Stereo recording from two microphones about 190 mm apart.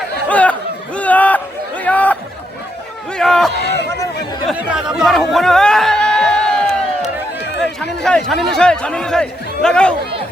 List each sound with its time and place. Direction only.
0.3 s chatter: 5° left (ahead or behind)
0.9 s a sound: 10° left (ahead or behind)
3.5 s speech: 60° left (ahead or behind)
4.4 s chatter: 5° right (ahead or behind)
8.3 s speech: centre (ahead or behind)